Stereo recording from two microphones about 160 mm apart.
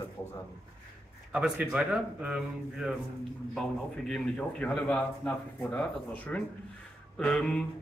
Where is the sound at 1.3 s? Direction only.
10° right (ahead or behind).